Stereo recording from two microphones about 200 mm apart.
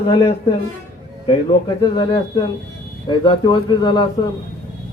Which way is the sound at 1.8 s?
25° left (ahead or behind).